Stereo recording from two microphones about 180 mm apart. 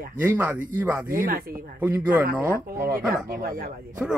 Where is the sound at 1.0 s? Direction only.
55° right (ahead or behind).